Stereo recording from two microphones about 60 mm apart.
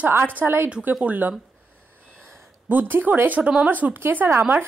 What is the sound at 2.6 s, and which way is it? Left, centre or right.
Speech, right.